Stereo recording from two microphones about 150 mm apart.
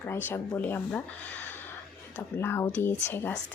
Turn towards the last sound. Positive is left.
turn(degrees=15)  # may be behind; listen again after turning